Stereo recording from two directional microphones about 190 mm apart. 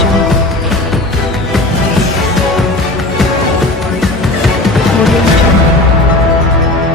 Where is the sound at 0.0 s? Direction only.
Centre (ahead or behind).